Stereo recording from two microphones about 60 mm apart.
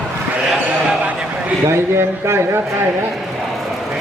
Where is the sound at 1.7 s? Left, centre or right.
Right.